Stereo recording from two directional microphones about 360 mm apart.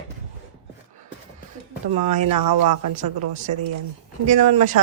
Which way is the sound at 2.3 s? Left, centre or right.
Right.